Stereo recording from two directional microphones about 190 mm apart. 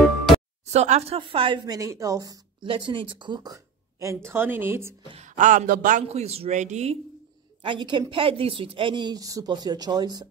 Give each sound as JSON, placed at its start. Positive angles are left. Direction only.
{"t": 0.7, "sound": "speech", "side_deg": -35}
{"t": 5.0, "sound": "speech", "side_deg": -35}
{"t": 7.6, "sound": "speech", "side_deg": -25}